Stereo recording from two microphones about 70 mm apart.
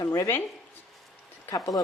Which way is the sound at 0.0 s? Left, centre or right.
Left.